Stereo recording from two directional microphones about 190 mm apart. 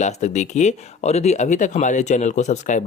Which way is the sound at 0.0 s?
40° left (ahead or behind).